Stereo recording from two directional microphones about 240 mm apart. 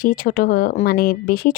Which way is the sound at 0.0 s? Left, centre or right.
Left.